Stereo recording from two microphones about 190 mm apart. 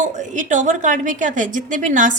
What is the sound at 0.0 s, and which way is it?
A woman's voice, 40° right (ahead or behind).